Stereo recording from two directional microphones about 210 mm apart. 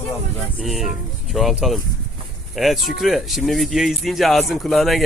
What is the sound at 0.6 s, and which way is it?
Speech, centre (ahead or behind).